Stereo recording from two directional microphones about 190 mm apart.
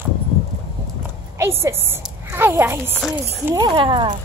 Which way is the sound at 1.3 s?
15° right (ahead or behind).